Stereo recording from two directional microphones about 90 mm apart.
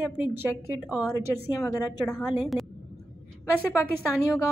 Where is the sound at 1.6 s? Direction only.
40° left (ahead or behind).